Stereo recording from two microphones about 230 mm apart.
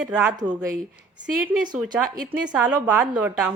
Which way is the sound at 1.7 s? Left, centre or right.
Centre.